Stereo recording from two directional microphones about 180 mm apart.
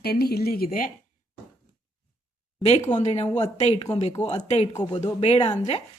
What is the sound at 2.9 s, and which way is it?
Speech, 35° left (ahead or behind).